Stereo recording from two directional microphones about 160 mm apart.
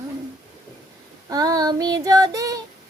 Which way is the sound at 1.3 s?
25° right (ahead or behind).